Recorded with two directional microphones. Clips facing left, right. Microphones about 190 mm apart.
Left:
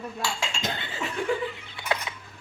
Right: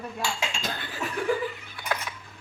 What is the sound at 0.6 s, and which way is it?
Laughter, 20° left (ahead or behind).